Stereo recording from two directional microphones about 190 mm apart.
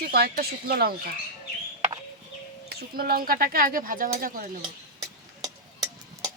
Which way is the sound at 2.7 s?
50° right (ahead or behind).